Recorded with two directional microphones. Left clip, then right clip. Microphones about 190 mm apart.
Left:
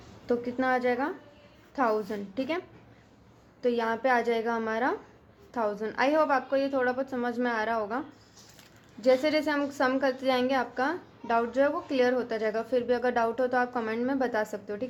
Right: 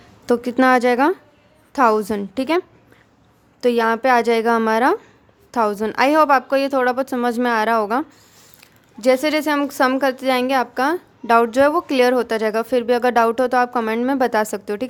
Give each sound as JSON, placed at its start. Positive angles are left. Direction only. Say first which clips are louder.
{"t": 0.3, "sound": "a woman's voice", "louder": "right 12 dB", "side_deg": -40}
{"t": 3.6, "sound": "a woman's voice", "louder": "right 10 dB", "side_deg": -35}